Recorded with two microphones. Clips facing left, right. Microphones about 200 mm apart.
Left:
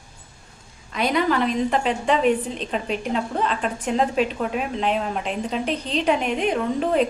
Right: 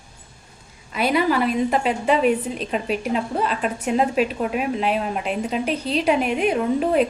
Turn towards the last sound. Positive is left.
turn(degrees=-5)  # may be behind; listen again after turning